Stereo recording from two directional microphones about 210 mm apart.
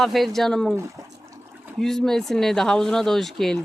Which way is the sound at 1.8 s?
Centre (ahead or behind).